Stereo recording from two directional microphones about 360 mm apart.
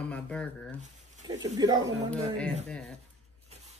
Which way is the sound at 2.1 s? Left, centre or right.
Centre.